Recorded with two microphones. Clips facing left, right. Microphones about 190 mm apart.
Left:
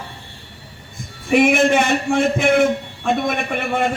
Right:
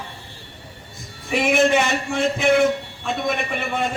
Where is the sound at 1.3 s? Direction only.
55° left (ahead or behind).